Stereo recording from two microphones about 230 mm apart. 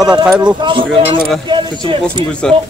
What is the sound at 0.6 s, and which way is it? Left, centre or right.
Speech, right.